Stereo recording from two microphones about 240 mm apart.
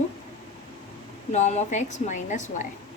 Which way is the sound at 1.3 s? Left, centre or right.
Left.